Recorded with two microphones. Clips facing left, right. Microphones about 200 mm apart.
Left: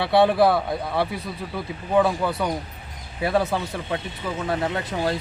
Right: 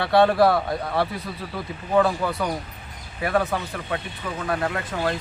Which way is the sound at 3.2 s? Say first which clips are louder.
Left 1 dB; 25° left (ahead or behind).